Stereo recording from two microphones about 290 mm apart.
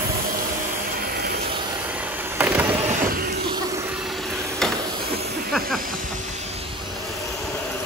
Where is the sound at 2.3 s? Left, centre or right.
Centre.